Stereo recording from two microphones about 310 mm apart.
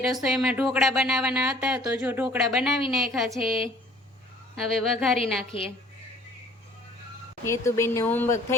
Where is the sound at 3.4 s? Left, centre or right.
Centre.